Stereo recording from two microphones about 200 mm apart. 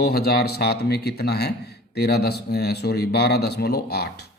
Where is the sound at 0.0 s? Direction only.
55° left (ahead or behind).